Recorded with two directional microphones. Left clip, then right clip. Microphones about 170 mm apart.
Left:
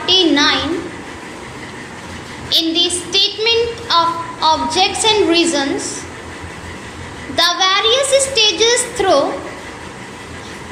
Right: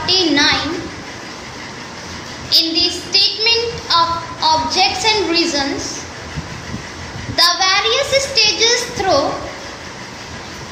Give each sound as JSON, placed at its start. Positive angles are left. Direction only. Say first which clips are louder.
{"t": 0.0, "sound": "a sound", "louder": "left 2 dB", "side_deg": 25}
{"t": 2.5, "sound": "a child's voice", "louder": "even", "side_deg": 30}
{"t": 7.3, "sound": "a child's voice", "louder": "even", "side_deg": 25}